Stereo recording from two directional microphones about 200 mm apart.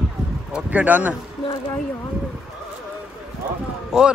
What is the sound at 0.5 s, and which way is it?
Speech, 5° right (ahead or behind).